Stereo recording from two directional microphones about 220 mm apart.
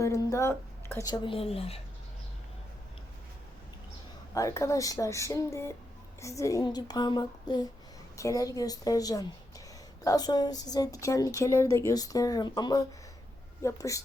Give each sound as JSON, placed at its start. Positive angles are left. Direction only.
{"t": 0.0, "sound": "speech", "side_deg": 15}
{"t": 4.4, "sound": "a woman's voice", "side_deg": 15}